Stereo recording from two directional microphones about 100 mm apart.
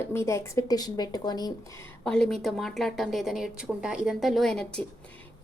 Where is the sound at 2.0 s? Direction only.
5° left (ahead or behind).